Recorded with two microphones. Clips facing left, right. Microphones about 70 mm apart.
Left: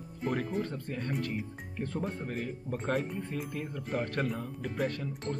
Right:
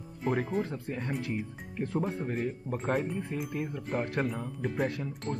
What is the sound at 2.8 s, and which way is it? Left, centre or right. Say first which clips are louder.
Speech: right 2 dB; centre.